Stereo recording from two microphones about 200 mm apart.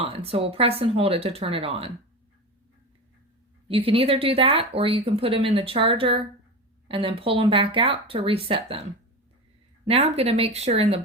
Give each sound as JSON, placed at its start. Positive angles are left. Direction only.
{"t": 0.0, "sound": "speech", "side_deg": -30}
{"t": 3.7, "sound": "speech", "side_deg": -30}
{"t": 9.8, "sound": "speech", "side_deg": -30}